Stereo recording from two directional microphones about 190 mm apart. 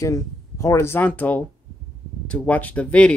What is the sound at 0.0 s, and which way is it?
Speech, 15° left (ahead or behind).